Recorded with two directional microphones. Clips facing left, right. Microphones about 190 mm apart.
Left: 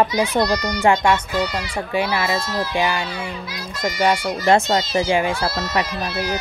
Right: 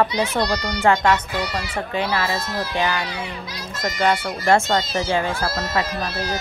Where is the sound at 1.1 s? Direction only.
5° right (ahead or behind).